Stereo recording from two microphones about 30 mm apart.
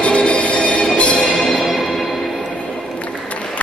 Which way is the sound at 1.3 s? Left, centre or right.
Centre.